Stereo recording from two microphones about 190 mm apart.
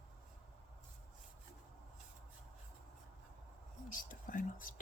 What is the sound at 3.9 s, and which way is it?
Whispering, 45° left (ahead or behind).